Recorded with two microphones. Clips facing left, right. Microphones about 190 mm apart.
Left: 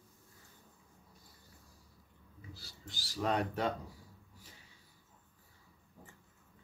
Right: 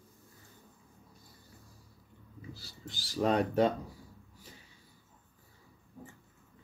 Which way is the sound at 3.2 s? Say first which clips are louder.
Right 7 dB; 25° right (ahead or behind).